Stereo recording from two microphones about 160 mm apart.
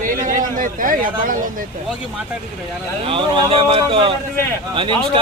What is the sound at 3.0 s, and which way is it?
Speech, 35° right (ahead or behind).